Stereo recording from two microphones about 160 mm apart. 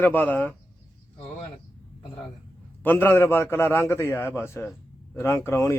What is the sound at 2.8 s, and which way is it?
A man's voice, 10° left (ahead or behind).